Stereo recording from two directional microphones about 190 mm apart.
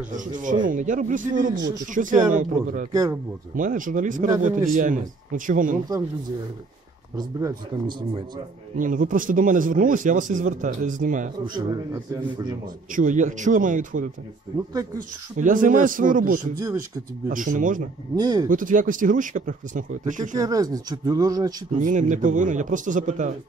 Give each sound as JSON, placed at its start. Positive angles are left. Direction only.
{"t": 0.1, "sound": "a man's voice", "side_deg": -40}
{"t": 2.9, "sound": "speech", "side_deg": -15}
{"t": 3.5, "sound": "a man's voice", "side_deg": -45}
{"t": 7.2, "sound": "speech", "side_deg": -20}
{"t": 8.7, "sound": "a man's voice", "side_deg": -45}
{"t": 11.4, "sound": "speech", "side_deg": -20}
{"t": 12.9, "sound": "a man's voice", "side_deg": -40}
{"t": 18.1, "sound": "speech", "side_deg": -20}
{"t": 18.5, "sound": "a man's voice", "side_deg": -45}
{"t": 20.3, "sound": "speech", "side_deg": -20}
{"t": 21.7, "sound": "a man's voice", "side_deg": -40}